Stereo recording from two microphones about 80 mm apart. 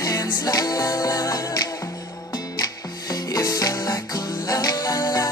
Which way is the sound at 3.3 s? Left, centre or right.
Left.